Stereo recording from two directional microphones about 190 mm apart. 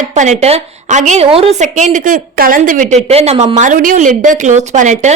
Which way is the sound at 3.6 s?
45° right (ahead or behind).